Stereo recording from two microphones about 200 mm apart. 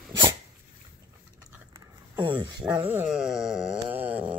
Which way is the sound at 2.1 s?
25° right (ahead or behind).